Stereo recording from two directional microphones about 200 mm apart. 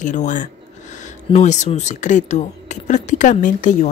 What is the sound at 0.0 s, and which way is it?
Speech, 40° left (ahead or behind).